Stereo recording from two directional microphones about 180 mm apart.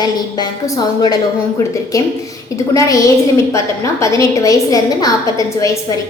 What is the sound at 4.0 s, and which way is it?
A woman's voice, 20° left (ahead or behind).